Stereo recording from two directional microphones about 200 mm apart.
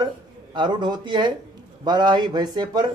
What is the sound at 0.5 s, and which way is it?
A man's voice, 20° right (ahead or behind).